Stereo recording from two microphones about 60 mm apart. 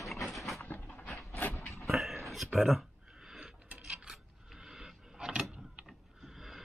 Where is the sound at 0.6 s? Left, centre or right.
Left.